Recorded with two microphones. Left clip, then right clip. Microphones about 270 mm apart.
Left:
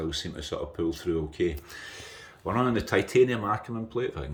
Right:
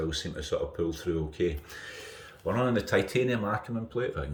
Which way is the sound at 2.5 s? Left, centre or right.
Left.